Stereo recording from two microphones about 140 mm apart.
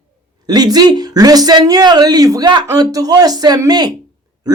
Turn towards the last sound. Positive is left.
turn(degrees=-25)  # may be behind; listen again after turning